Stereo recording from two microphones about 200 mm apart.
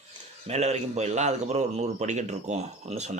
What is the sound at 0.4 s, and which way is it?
A man's voice, 30° right (ahead or behind).